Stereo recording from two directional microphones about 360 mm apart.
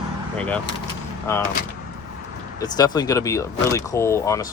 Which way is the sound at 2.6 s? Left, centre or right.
Centre.